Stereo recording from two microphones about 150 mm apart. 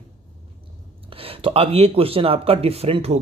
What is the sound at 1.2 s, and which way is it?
Speech, 40° right (ahead or behind).